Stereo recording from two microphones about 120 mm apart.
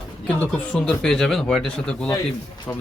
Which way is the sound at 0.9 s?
5° left (ahead or behind).